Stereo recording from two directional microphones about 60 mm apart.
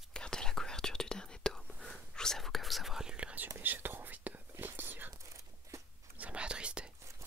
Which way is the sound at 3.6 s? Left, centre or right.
Right.